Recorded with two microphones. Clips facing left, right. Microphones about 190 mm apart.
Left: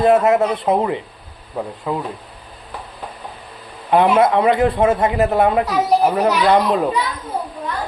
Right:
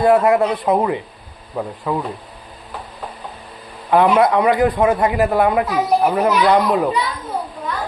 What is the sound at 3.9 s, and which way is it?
A man's voice, 20° left (ahead or behind).